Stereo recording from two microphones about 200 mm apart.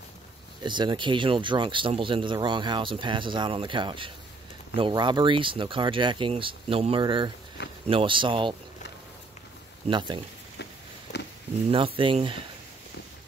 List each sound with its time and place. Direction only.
0.7 s speech: 25° right (ahead or behind)
7.6 s speech: 60° left (ahead or behind)
7.9 s speech: 25° right (ahead or behind)
9.8 s speech: 25° right (ahead or behind)
10.6 s a sound: 60° left (ahead or behind)
11.7 s speech: 25° right (ahead or behind)